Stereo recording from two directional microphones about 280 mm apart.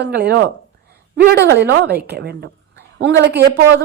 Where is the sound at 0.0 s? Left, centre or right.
Right.